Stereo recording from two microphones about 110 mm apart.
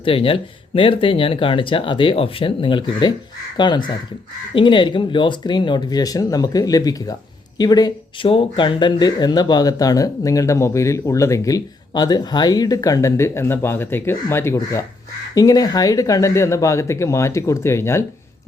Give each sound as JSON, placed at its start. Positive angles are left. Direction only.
{"t": 0.0, "sound": "speech", "side_deg": 55}